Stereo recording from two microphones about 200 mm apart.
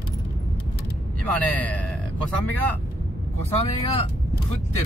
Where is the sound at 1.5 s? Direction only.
5° left (ahead or behind).